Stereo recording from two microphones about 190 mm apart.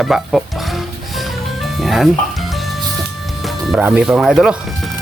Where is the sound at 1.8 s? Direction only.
Centre (ahead or behind).